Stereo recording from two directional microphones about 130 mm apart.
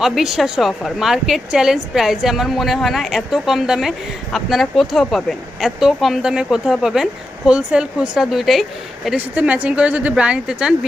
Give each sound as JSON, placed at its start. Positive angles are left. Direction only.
{"t": 0.0, "sound": "a woman's voice", "side_deg": 0}